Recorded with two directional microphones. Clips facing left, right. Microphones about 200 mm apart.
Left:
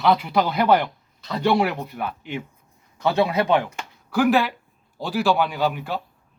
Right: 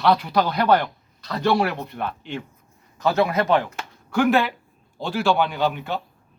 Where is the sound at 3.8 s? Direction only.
Centre (ahead or behind).